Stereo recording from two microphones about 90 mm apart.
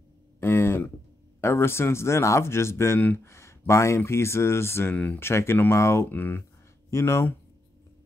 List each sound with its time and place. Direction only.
0.4 s a sound: 25° left (ahead or behind)
1.4 s speech: 25° left (ahead or behind)
4.9 s speech: 15° left (ahead or behind)
5.2 s speech: 30° left (ahead or behind)
6.9 s speech: 30° left (ahead or behind)